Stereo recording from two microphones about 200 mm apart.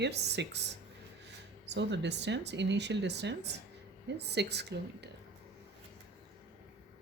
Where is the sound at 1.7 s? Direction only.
60° right (ahead or behind).